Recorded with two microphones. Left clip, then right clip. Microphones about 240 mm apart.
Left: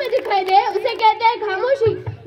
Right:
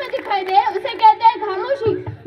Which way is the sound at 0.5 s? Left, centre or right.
Left.